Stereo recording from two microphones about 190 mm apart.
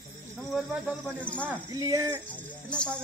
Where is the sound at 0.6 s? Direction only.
5° right (ahead or behind).